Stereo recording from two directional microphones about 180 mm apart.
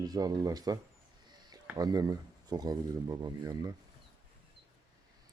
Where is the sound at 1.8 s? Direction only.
20° right (ahead or behind).